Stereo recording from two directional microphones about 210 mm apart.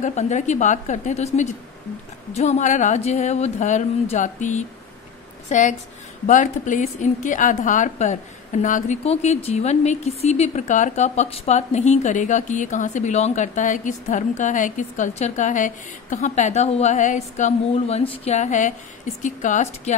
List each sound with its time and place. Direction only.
0.0 s a woman's voice: 35° left (ahead or behind)